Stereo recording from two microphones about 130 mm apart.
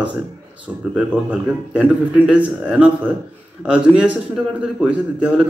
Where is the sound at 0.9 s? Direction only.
10° right (ahead or behind).